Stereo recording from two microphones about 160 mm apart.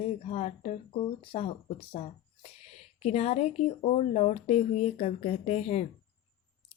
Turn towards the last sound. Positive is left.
turn(degrees=40)  # may be behind; listen again after turning